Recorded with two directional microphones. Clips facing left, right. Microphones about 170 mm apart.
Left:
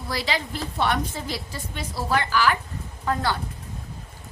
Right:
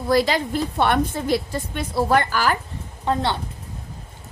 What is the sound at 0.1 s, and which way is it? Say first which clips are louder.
A woman's voice: right 9 dB; 50° right (ahead or behind).